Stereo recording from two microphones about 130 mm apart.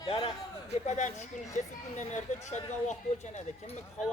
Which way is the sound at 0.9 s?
65° left (ahead or behind).